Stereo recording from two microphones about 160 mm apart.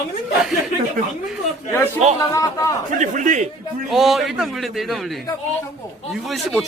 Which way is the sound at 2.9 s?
50° right (ahead or behind).